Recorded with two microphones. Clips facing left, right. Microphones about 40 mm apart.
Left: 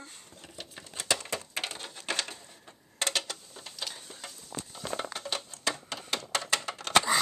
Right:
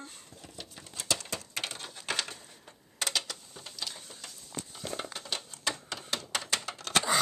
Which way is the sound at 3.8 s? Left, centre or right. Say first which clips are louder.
Left 1 dB; centre.